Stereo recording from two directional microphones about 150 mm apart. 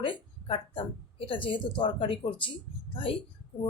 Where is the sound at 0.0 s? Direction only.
35° left (ahead or behind).